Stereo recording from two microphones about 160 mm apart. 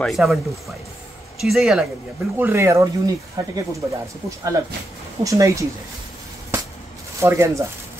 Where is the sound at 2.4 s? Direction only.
15° right (ahead or behind).